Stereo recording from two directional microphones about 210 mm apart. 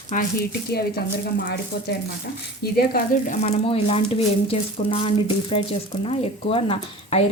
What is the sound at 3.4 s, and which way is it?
Speech, 30° left (ahead or behind).